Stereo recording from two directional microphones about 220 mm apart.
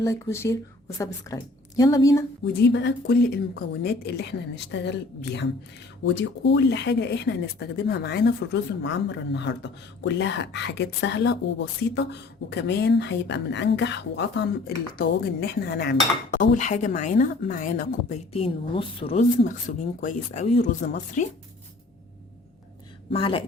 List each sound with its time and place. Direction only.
0.0 s a woman's voice: 10° left (ahead or behind)
2.4 s speech: 50° left (ahead or behind)
23.1 s speech: 25° left (ahead or behind)